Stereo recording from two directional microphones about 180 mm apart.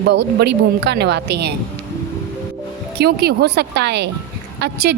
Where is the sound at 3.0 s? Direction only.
60° right (ahead or behind).